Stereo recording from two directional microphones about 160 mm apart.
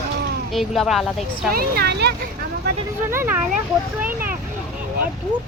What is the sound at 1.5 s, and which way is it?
Speech, 85° right.